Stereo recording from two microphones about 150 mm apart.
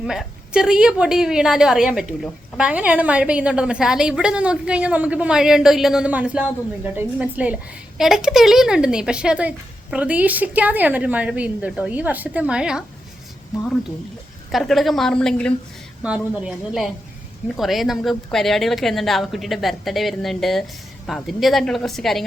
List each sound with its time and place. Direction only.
0.0 s a woman's voice: 5° right (ahead or behind)